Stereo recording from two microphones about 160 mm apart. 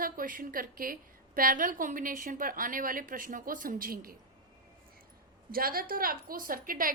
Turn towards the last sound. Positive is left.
turn(degrees=-60)  # may be behind; listen again after turning